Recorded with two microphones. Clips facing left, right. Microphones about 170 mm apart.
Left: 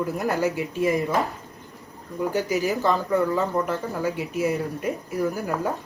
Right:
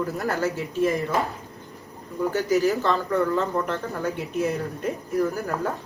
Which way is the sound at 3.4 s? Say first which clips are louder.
Left 1 dB; 5° left (ahead or behind).